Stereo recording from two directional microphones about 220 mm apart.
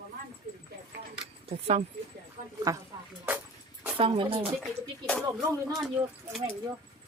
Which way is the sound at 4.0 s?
25° right (ahead or behind).